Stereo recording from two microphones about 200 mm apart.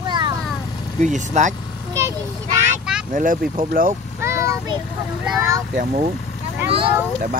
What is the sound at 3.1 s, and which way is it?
Speech, 45° right (ahead or behind).